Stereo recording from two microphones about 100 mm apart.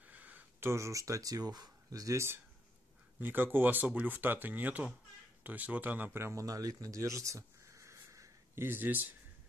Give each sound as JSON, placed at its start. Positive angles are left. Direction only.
{"t": 0.0, "sound": "speech", "side_deg": -15}